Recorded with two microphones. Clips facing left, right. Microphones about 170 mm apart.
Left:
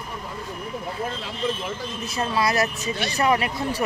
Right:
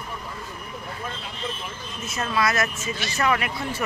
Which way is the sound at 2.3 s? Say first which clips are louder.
Left 1 dB; 35° left (ahead or behind).